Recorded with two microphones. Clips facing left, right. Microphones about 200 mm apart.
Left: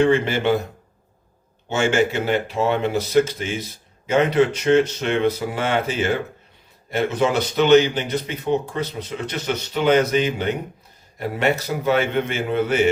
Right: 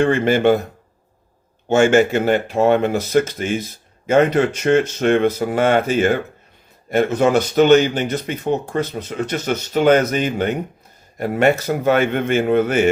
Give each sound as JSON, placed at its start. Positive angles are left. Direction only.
{"t": 0.0, "sound": "speech", "side_deg": -50}
{"t": 1.6, "sound": "speech", "side_deg": -50}